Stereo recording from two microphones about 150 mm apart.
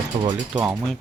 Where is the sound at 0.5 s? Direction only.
5° right (ahead or behind).